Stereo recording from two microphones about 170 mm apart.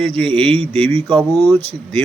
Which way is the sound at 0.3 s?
30° right (ahead or behind).